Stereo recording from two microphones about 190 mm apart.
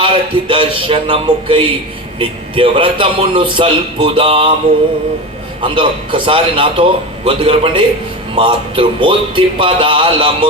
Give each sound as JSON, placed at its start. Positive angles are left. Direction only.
{"t": 0.0, "sound": "a man's voice", "side_deg": -25}
{"t": 5.6, "sound": "a man's voice", "side_deg": -25}